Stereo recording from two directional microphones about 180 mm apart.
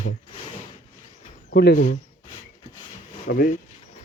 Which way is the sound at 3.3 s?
50° left (ahead or behind).